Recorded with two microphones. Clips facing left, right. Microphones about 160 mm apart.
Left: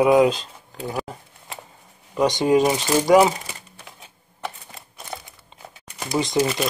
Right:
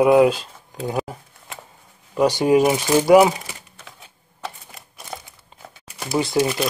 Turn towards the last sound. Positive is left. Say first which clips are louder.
# right 1 dB
turn(degrees=-10)  # may be behind; listen again after turning